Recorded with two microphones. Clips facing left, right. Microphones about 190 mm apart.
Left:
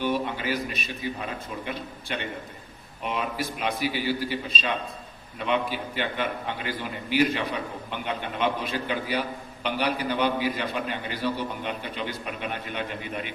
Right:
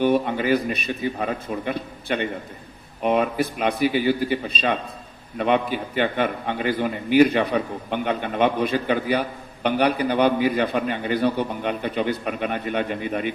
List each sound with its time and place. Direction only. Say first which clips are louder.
0.0 s a man's voice: right 7 dB; 55° right (ahead or behind)